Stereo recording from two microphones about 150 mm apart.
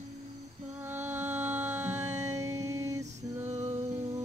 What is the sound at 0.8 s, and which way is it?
Music, 15° right (ahead or behind).